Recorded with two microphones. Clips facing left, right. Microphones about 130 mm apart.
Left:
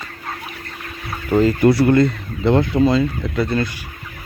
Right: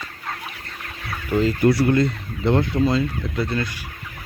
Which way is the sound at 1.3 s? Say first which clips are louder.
Left 5 dB; 50° left (ahead or behind).